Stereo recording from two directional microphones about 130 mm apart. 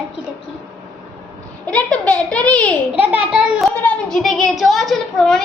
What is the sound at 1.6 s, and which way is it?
Speech, 10° left (ahead or behind).